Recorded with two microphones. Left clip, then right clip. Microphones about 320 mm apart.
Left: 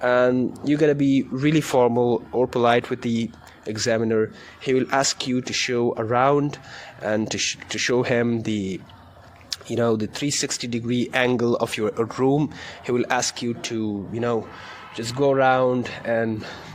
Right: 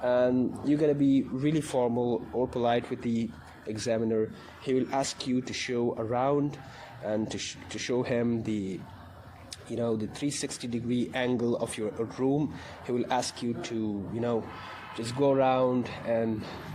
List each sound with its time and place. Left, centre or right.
0.0 s speech: left